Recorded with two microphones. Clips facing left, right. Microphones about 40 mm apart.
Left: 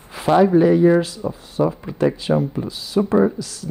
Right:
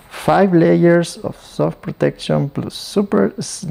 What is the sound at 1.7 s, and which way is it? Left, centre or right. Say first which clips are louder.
Speech: right 2 dB; right.